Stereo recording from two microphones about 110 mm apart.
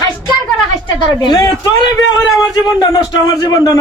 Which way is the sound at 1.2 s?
35° left (ahead or behind).